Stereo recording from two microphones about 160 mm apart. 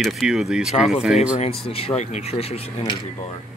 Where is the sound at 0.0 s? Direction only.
Centre (ahead or behind).